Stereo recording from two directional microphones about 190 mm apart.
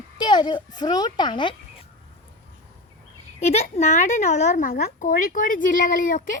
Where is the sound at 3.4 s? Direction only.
35° left (ahead or behind).